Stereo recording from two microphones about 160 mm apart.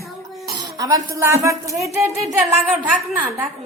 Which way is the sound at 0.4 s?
25° right (ahead or behind).